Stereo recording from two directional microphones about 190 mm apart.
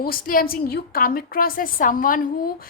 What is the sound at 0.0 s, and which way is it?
A woman's voice, 50° left (ahead or behind).